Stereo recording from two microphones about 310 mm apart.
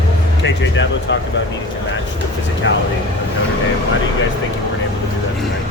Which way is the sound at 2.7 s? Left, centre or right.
Left.